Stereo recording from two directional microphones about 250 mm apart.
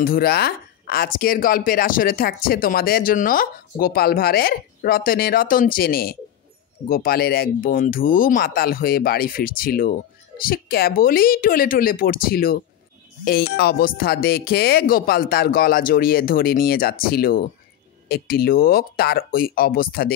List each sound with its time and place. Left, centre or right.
0.0 s speech: left